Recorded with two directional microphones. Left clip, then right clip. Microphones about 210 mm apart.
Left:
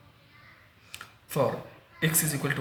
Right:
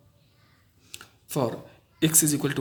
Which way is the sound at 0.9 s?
45° right (ahead or behind).